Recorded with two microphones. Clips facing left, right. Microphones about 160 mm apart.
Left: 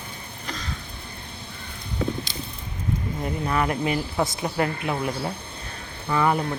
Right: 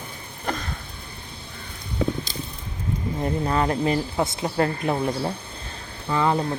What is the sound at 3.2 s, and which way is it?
A woman's voice, 30° right (ahead or behind).